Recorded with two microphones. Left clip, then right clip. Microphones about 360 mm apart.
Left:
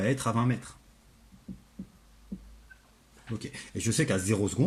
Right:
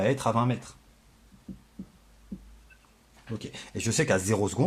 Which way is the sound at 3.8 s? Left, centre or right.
Centre.